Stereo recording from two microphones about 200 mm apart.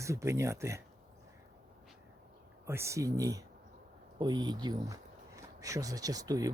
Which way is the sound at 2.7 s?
15° right (ahead or behind).